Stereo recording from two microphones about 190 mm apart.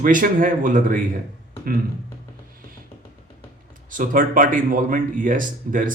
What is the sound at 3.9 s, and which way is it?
Speech, 45° right (ahead or behind).